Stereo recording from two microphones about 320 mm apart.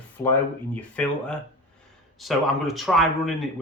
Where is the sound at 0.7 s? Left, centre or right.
Centre.